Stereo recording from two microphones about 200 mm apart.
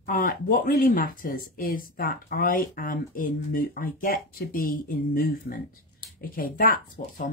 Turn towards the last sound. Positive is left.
turn(degrees=45)  # may be behind; listen again after turning